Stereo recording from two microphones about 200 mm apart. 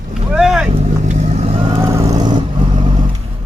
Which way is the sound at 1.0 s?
35° right (ahead or behind).